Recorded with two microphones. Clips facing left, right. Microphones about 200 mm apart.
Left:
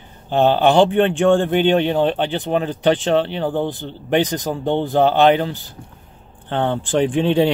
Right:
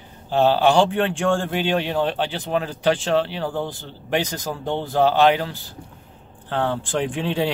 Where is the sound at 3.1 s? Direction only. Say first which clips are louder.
Left 4 dB; 20° left (ahead or behind).